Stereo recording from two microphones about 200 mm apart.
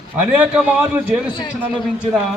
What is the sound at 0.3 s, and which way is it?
Speech, 5° right (ahead or behind).